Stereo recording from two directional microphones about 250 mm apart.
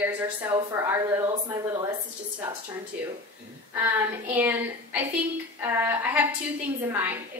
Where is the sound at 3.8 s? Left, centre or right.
Centre.